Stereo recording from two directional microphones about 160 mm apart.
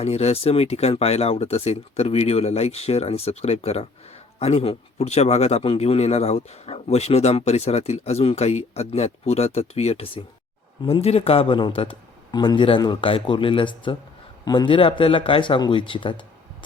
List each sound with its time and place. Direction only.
0.0 s a man's voice: 40° left (ahead or behind)